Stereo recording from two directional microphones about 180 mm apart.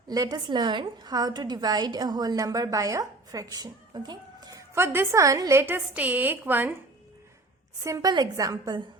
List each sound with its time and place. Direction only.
0.1 s a woman's voice: 20° right (ahead or behind)
7.9 s a woman's voice: 20° right (ahead or behind)